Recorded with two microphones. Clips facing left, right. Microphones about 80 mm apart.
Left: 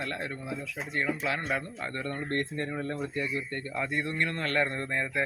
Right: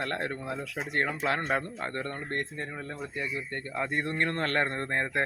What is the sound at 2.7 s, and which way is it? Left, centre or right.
Speech, centre.